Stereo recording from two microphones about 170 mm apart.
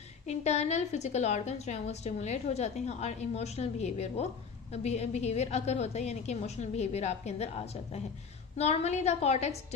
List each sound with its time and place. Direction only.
0.3 s a woman's voice: 40° left (ahead or behind)